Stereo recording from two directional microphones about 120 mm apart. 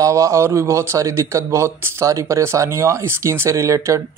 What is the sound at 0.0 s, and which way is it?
Speech, 25° right (ahead or behind).